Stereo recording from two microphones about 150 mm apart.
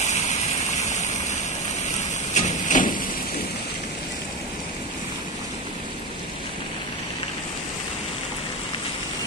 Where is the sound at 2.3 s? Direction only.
50° left (ahead or behind).